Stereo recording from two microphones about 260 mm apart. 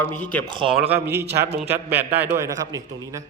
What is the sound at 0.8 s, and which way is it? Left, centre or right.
Speech, right.